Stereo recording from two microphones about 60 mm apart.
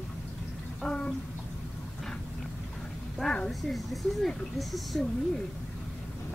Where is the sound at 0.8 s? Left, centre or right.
Centre.